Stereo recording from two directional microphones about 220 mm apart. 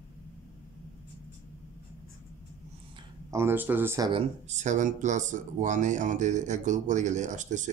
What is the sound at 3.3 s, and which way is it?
Speech, 10° right (ahead or behind).